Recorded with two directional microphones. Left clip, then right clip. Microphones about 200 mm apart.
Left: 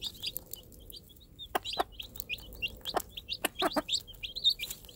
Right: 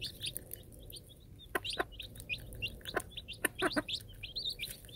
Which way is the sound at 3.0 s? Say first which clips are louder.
Left 4 dB; 25° left (ahead or behind).